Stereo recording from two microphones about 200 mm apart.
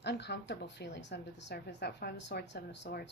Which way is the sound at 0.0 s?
55° left (ahead or behind).